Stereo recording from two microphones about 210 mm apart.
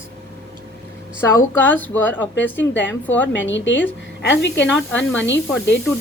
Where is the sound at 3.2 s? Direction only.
60° left (ahead or behind).